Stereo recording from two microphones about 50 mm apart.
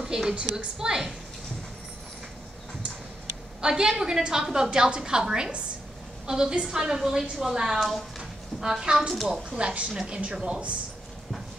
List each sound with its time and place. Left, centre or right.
0.0 s a woman's voice: centre
3.6 s a woman's voice: centre